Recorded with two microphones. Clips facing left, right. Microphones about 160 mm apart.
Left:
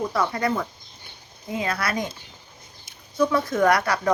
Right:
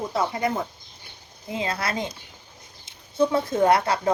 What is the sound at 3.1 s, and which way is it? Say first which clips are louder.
A woman's voice: even; 25° right (ahead or behind).